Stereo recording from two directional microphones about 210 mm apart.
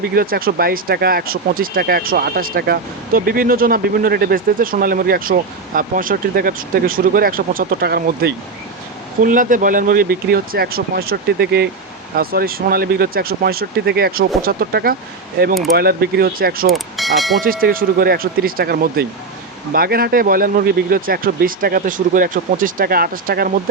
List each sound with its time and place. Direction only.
0.1 s speech: 45° right (ahead or behind)
16.7 s speech: centre (ahead or behind)
17.4 s speech: 45° right (ahead or behind)